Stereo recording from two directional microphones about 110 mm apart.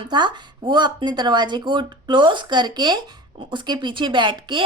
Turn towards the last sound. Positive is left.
turn(degrees=-45)  # may be behind; listen again after turning